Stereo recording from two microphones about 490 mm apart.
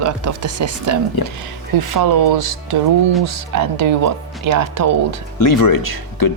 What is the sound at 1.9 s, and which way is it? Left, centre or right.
Speech, right.